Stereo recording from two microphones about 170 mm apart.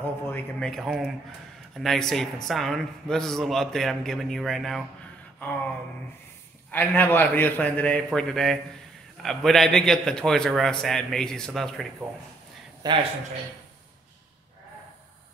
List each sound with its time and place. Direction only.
0.0 s a man's voice: 10° left (ahead or behind)
6.7 s a man's voice: 10° left (ahead or behind)
12.8 s speech: 25° right (ahead or behind)